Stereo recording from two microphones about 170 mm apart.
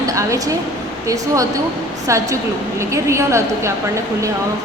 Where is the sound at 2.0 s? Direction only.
20° right (ahead or behind).